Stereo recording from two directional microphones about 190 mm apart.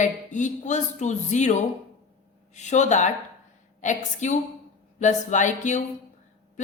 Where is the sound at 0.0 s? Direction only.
40° left (ahead or behind).